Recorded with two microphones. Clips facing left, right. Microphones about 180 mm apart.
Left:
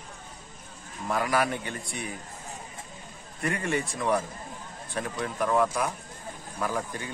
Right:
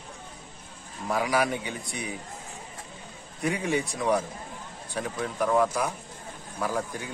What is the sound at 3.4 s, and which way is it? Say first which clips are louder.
A man's voice: right 2 dB; centre (ahead or behind).